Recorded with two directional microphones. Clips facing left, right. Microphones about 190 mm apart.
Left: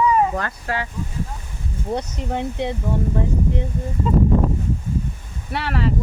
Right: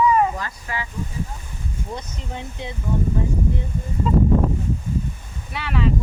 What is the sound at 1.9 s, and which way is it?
Speech, 65° left (ahead or behind).